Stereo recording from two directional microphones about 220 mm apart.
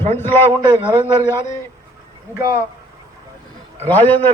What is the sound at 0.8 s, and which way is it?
Speech, 5° right (ahead or behind).